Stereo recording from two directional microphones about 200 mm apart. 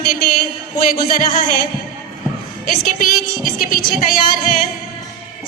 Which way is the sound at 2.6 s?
45° left (ahead or behind).